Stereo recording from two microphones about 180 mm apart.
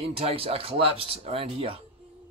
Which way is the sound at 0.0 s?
30° right (ahead or behind).